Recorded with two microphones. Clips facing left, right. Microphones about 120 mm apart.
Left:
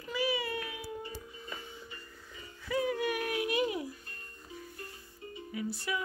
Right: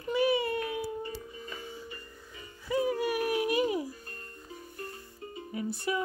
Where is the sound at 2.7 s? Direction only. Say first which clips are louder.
Right 3 dB; 30° right (ahead or behind).